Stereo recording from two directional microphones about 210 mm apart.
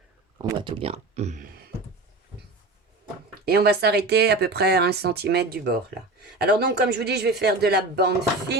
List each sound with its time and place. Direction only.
0.6 s speech: 25° right (ahead or behind)
3.4 s speech: 50° right (ahead or behind)